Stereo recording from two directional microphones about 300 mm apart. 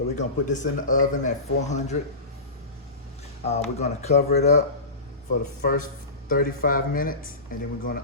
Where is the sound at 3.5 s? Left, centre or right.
Left.